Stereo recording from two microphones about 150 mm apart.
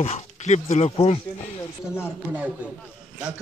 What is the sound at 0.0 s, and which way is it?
Speech, 45° left (ahead or behind).